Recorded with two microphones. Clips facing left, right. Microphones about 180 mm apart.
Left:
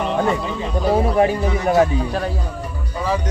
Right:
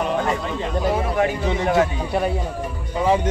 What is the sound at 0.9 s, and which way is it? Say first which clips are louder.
Speech: left 7 dB; 30° left (ahead or behind).